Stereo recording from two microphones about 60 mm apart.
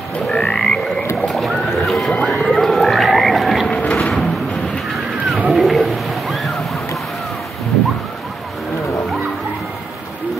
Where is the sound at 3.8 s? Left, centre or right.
Left.